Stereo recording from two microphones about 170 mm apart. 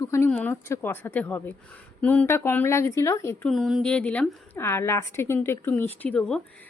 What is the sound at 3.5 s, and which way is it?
Speech, centre (ahead or behind).